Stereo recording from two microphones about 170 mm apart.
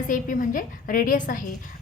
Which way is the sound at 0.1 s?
50° left (ahead or behind).